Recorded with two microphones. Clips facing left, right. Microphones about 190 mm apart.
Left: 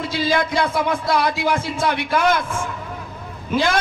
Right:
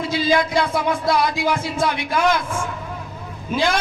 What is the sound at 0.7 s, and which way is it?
A man's voice, 50° left (ahead or behind).